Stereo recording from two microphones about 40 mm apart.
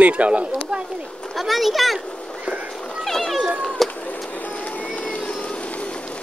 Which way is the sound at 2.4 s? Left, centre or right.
Right.